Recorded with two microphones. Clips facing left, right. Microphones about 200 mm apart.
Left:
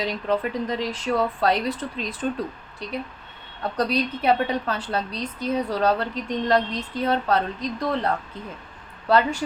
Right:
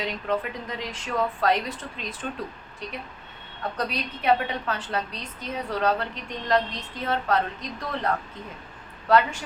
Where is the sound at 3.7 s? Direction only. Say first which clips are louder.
Left 9 dB; 35° left (ahead or behind).